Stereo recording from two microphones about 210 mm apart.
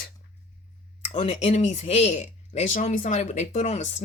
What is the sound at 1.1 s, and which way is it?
Speech, 30° left (ahead or behind).